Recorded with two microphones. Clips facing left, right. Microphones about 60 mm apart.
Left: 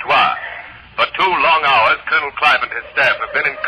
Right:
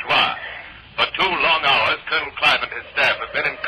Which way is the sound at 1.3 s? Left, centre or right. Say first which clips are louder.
Left 7 dB; left.